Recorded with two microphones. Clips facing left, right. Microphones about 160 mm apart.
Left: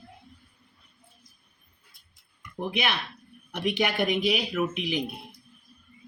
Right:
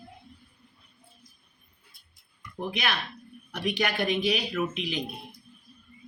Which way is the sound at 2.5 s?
20° left (ahead or behind).